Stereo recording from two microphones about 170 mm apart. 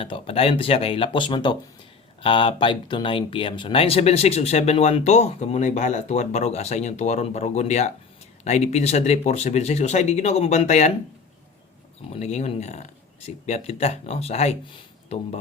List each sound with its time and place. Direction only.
0.0 s speech: 35° left (ahead or behind)
12.1 s speech: 40° left (ahead or behind)